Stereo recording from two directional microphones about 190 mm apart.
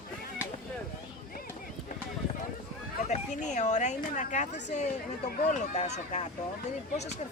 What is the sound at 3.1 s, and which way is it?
Speech, 40° left (ahead or behind).